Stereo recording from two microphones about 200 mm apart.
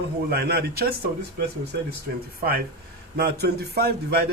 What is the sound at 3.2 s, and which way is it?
Speech, 55° right (ahead or behind).